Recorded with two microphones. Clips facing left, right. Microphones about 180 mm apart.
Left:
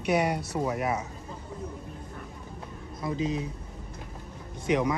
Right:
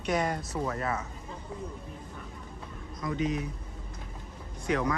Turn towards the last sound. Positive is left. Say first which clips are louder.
# left 3 dB
turn(degrees=20)  # may be behind; listen again after turning